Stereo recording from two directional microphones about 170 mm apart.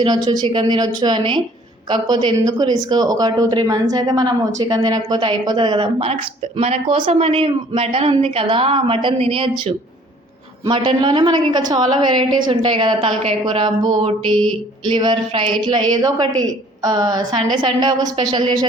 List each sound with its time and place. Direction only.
0.0 s speech: 25° right (ahead or behind)